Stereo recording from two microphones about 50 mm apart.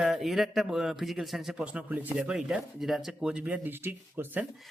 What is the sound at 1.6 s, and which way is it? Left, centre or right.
Speech, right.